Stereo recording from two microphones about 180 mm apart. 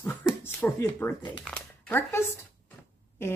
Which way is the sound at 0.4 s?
10° left (ahead or behind).